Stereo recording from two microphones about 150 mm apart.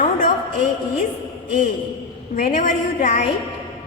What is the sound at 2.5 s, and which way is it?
Speech, 60° left (ahead or behind).